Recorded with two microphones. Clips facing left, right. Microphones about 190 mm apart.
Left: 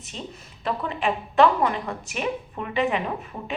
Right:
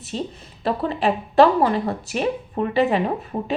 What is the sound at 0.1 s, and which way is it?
A woman's voice, 35° right (ahead or behind).